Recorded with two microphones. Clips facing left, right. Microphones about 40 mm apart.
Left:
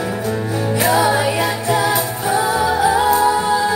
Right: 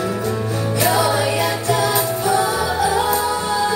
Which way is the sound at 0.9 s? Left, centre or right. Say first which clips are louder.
Left 2 dB; centre.